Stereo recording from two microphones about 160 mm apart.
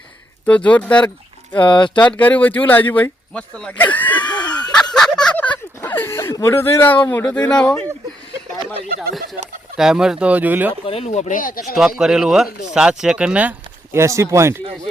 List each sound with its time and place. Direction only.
0.4 s speech: 10° left (ahead or behind)
1.5 s speech: 30° left (ahead or behind)
2.1 s speech: 10° left (ahead or behind)
4.2 s snicker: 25° left (ahead or behind)
4.9 s a sound: 5° left (ahead or behind)
6.7 s speech: 10° left (ahead or behind)
9.7 s speech: 5° right (ahead or behind)
10.8 s speech: 40° left (ahead or behind); by 11.8 s 60° left (ahead or behind)
11.8 s speech: 5° right (ahead or behind)